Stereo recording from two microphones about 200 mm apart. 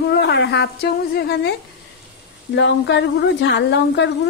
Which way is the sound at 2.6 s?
60° left (ahead or behind).